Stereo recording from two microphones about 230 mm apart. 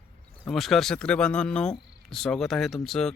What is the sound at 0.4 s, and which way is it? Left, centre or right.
Speech, centre.